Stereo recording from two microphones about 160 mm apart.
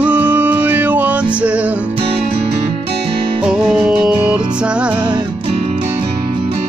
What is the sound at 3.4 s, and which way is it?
Music, 5° right (ahead or behind).